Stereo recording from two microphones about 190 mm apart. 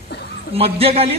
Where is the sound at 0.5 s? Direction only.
30° right (ahead or behind).